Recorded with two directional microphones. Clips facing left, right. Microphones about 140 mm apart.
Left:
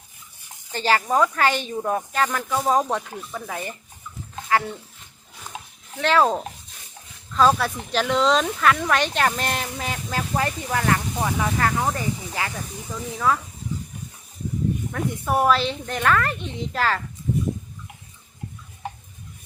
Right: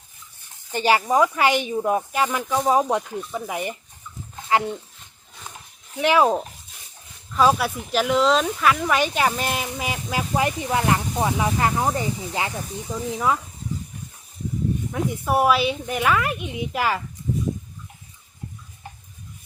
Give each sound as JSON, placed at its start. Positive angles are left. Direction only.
{"t": 0.7, "sound": "speech", "side_deg": -15}
{"t": 3.3, "sound": "speech", "side_deg": -15}
{"t": 5.5, "sound": "dog", "side_deg": 90}
{"t": 6.0, "sound": "speech", "side_deg": -10}
{"t": 14.9, "sound": "speech", "side_deg": -5}